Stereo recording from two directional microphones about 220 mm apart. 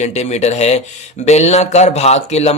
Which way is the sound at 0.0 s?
30° left (ahead or behind).